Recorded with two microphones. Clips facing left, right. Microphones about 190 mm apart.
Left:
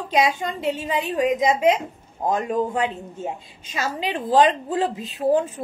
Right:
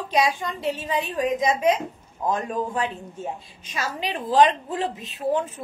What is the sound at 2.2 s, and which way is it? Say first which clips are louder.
Speech: left 2 dB; 45° left (ahead or behind).